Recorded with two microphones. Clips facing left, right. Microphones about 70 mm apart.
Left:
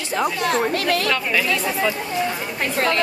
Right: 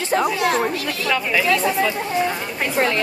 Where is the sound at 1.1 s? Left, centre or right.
Centre.